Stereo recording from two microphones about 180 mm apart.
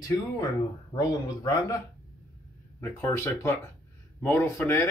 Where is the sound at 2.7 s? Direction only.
15° left (ahead or behind).